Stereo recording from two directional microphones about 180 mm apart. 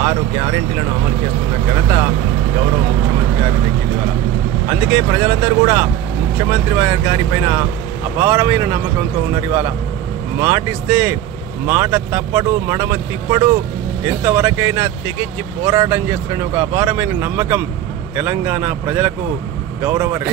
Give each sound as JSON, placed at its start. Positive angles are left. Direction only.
{"t": 0.0, "sound": "speech", "side_deg": -20}
{"t": 4.6, "sound": "speech", "side_deg": -15}